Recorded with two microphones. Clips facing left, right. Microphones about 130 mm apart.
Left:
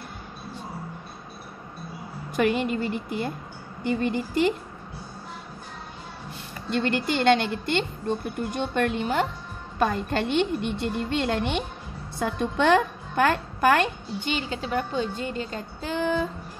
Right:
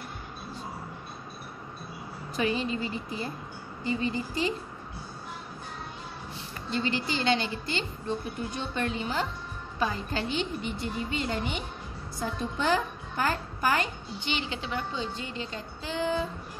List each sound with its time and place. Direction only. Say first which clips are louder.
2.3 s a woman's voice: left 5 dB; 60° left (ahead or behind)
6.7 s a woman's voice: left 5 dB; 60° left (ahead or behind)
14.3 s speech: left 5 dB; 45° left (ahead or behind)